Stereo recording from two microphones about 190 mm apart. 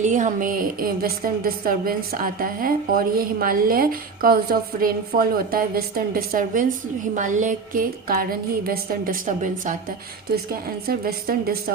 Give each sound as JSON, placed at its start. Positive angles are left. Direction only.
{"t": 0.0, "sound": "a woman's voice", "side_deg": -40}
{"t": 10.3, "sound": "a woman's voice", "side_deg": -50}